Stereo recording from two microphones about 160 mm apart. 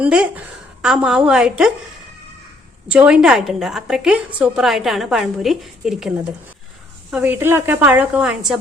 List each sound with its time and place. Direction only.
0.0 s a woman's voice: 5° right (ahead or behind)
2.9 s a woman's voice: 5° right (ahead or behind)